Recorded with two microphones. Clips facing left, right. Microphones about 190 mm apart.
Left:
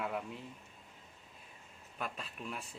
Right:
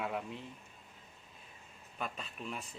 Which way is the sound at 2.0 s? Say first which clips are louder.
Right 1 dB; 5° left (ahead or behind).